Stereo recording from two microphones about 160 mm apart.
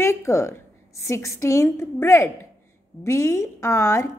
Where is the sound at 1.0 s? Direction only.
20° left (ahead or behind).